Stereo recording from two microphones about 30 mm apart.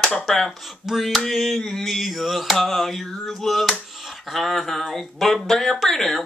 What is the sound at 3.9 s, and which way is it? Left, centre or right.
Finger snapping, centre.